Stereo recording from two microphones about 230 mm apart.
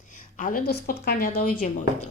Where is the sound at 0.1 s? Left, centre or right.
Left.